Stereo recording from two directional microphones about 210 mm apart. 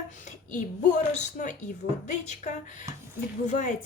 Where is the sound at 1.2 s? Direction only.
35° left (ahead or behind).